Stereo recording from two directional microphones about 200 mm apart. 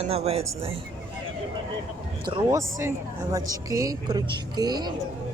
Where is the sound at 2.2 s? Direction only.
20° right (ahead or behind).